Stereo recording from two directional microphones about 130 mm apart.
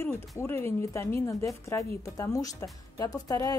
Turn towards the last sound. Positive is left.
turn(degrees=30)  # may be behind; listen again after turning